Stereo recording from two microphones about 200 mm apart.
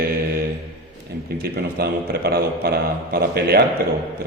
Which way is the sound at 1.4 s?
50° right (ahead or behind).